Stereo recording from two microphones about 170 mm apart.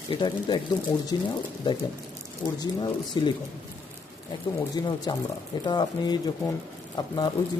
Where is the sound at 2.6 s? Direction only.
25° left (ahead or behind).